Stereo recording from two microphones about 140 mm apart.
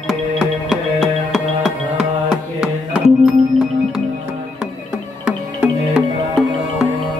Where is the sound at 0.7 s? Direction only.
Centre (ahead or behind).